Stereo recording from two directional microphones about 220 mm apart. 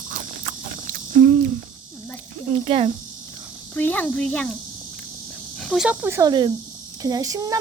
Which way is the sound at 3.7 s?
5° left (ahead or behind).